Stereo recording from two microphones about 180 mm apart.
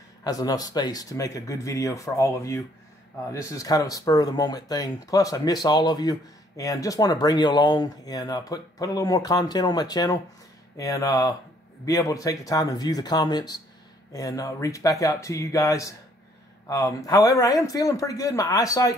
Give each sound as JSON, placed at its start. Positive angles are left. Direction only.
{"t": 0.2, "sound": "speech", "side_deg": 20}